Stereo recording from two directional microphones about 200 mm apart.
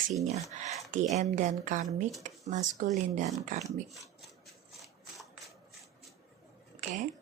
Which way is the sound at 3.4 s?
40° right (ahead or behind).